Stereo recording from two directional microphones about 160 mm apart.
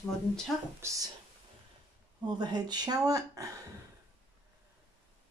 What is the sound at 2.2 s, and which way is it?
Speech, 25° right (ahead or behind).